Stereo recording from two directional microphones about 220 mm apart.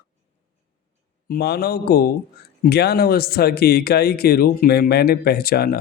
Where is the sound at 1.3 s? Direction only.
45° left (ahead or behind).